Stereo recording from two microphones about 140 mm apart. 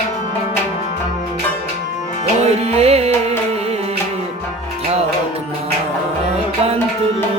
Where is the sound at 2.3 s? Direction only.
50° right (ahead or behind).